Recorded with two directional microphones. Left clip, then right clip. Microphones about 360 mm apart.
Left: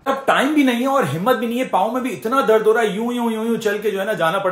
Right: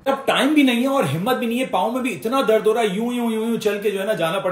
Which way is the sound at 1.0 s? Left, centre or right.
Centre.